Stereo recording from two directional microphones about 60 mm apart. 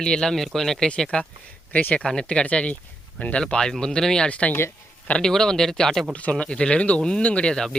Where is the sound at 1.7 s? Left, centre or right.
Left.